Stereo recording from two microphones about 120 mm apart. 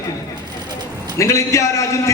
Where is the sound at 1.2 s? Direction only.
25° left (ahead or behind).